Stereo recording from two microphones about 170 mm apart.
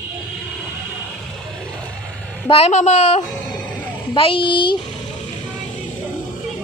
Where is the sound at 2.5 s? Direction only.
40° left (ahead or behind).